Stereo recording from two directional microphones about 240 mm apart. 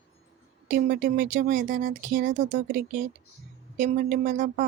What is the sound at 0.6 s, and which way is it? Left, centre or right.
Speech, right.